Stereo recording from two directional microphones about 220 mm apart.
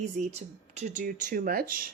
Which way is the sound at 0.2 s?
30° right (ahead or behind).